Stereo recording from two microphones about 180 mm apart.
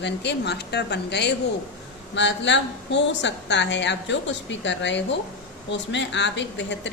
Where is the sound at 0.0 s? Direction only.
70° left (ahead or behind).